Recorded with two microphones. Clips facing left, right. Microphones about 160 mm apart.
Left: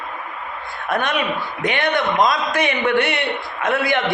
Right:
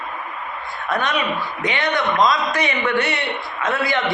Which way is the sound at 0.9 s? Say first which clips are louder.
Left 1 dB; 50° left (ahead or behind).